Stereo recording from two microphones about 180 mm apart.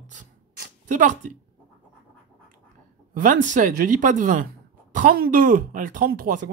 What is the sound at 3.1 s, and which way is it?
Speech, 50° right (ahead or behind).